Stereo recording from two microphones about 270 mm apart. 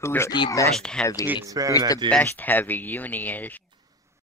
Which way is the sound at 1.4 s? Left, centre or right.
Centre.